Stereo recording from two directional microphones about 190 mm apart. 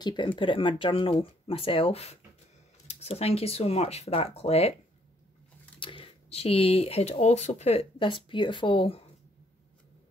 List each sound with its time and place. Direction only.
0.0 s speech: 25° left (ahead or behind)
5.8 s speech: 30° left (ahead or behind)